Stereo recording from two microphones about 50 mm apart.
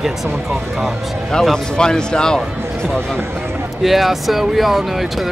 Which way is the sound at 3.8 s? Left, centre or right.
Centre.